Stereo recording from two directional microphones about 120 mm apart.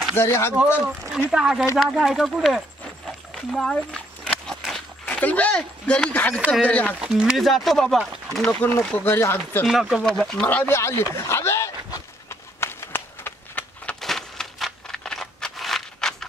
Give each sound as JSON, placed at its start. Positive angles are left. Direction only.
{"t": 0.1, "sound": "speech", "side_deg": 20}
{"t": 1.3, "sound": "speech", "side_deg": -5}
{"t": 3.1, "sound": "a sound", "side_deg": 0}
{"t": 6.6, "sound": "speech", "side_deg": 10}
{"t": 7.0, "sound": "speech", "side_deg": -5}
{"t": 8.5, "sound": "speech", "side_deg": 15}
{"t": 9.7, "sound": "speech", "side_deg": 0}
{"t": 10.4, "sound": "speech", "side_deg": 15}
{"t": 12.3, "sound": "a sound", "side_deg": 20}
{"t": 14.0, "sound": "a sound", "side_deg": 0}